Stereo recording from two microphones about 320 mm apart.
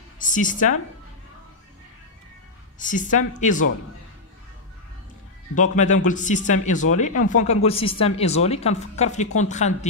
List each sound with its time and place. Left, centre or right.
0.2 s speech: left
2.8 s a woman's voice: left
5.5 s a woman's voice: left